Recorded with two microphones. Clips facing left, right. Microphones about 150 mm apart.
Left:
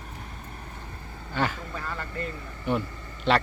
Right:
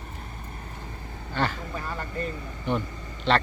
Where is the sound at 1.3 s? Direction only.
10° left (ahead or behind).